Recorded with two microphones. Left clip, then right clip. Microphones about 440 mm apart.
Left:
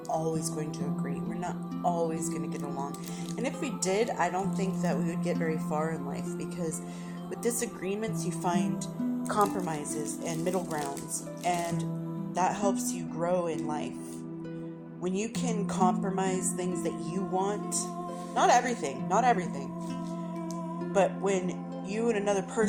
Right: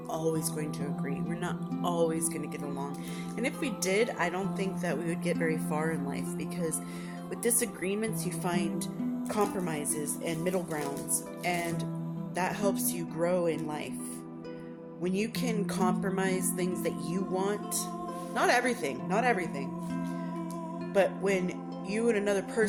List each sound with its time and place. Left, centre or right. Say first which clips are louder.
0.1 s music: left 1 dB; right
3.4 s speech: even; right
7.4 s speech: right 1 dB; right
12.4 s speech: left 2 dB; right
15.0 s speech: even; right
20.9 s music: even; right
21.9 s speech: even; right